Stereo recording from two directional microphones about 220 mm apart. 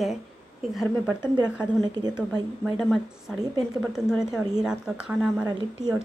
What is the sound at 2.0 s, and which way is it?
Speech, 15° right (ahead or behind).